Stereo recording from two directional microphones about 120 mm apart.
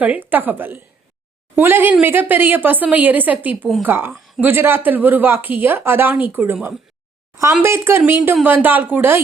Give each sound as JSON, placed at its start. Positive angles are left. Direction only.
{"t": 0.0, "sound": "speech", "side_deg": -15}